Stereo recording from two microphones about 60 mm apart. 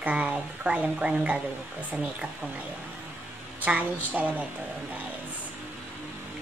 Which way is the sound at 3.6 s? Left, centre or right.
Right.